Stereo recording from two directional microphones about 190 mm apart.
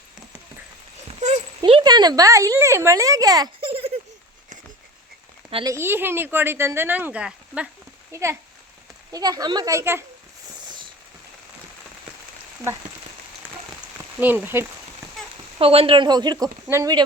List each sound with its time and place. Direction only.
1.2 s a sound: 35° right (ahead or behind)
5.5 s a child's voice: 30° right (ahead or behind)
5.7 s speech: 10° right (ahead or behind)
14.2 s speech: 10° right (ahead or behind)
15.5 s speech: 30° right (ahead or behind)